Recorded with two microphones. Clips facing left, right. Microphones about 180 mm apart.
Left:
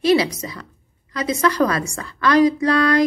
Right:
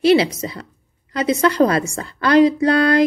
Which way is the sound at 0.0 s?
30° right (ahead or behind).